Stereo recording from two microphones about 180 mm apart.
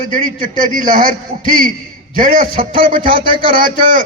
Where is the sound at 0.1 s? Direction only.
50° right (ahead or behind).